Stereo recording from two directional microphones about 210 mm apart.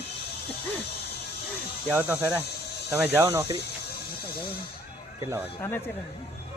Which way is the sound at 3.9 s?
50° left (ahead or behind).